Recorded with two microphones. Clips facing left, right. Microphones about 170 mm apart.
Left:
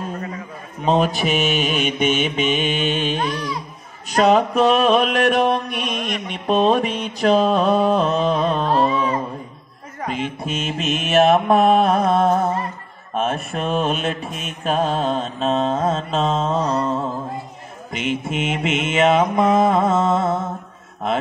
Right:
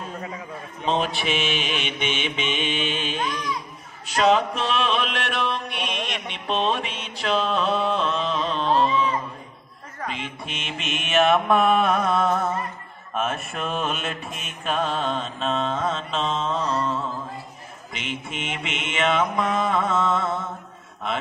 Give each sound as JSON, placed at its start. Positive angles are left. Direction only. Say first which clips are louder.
{"t": 0.8, "sound": "mantra", "louder": "left 6 dB", "side_deg": 45}
{"t": 13.9, "sound": "mantra", "louder": "left 6 dB", "side_deg": 0}
{"t": 14.6, "sound": "mantra", "louder": "left 5 dB", "side_deg": 40}